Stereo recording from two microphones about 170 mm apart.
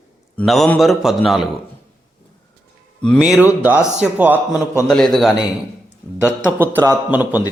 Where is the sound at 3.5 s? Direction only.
10° right (ahead or behind).